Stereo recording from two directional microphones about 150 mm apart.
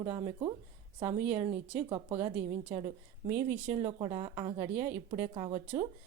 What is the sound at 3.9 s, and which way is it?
A woman's voice, 35° right (ahead or behind).